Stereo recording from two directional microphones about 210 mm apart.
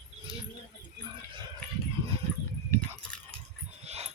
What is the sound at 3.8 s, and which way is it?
Dog, 30° right (ahead or behind).